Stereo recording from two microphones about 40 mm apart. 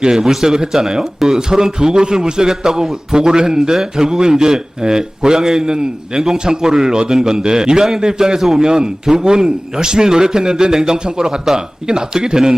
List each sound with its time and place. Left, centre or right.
0.1 s a man's voice: centre